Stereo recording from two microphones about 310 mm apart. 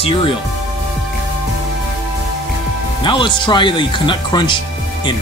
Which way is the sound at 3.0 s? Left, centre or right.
Centre.